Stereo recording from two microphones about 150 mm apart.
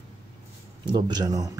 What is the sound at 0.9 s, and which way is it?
Speech, 30° right (ahead or behind).